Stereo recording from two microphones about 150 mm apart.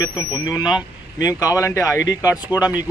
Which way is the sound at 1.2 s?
25° left (ahead or behind).